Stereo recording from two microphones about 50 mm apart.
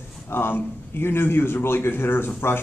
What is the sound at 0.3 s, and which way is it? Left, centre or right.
Speech, left.